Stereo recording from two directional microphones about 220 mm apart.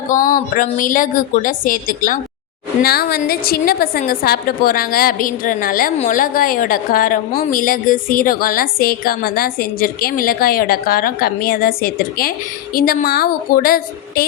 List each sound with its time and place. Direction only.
0.1 s a woman's voice: 40° left (ahead or behind)